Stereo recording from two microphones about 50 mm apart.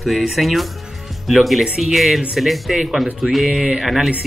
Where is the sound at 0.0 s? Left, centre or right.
Centre.